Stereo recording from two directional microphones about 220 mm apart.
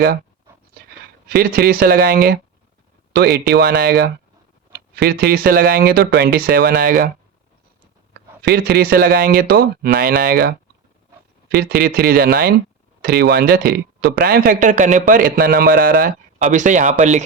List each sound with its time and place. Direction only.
0.8 s a sound: 45° right (ahead or behind)
1.3 s speech: 45° right (ahead or behind)
8.4 s a man's voice: 45° right (ahead or behind)